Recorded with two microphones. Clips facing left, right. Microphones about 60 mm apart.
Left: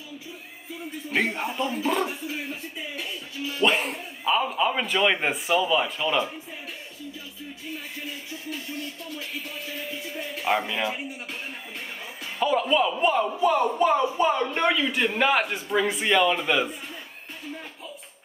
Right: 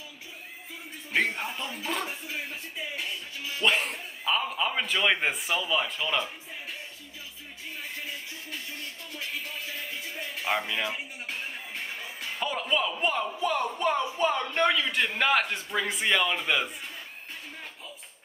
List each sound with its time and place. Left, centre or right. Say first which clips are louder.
1.1 s speech: left 2 dB; centre
10.4 s speech: left 4 dB; centre
12.4 s a man's voice: left 7 dB; centre